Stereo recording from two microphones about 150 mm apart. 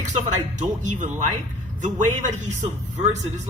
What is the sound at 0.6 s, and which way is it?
A man's voice, 55° right (ahead or behind).